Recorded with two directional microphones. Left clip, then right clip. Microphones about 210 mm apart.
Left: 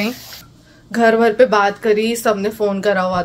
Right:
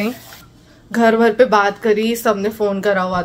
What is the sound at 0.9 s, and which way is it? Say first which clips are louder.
A woman's voice: even; 5° right (ahead or behind).